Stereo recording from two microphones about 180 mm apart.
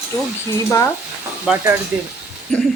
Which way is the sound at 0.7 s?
15° left (ahead or behind).